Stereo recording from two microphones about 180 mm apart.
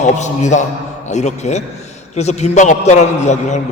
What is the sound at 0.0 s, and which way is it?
A man's voice, 40° left (ahead or behind).